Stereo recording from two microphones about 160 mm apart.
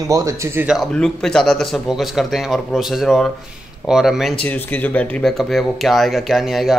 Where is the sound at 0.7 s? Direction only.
Centre (ahead or behind).